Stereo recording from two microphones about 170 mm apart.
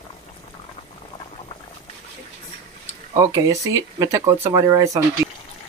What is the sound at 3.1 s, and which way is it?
Speech, 20° right (ahead or behind).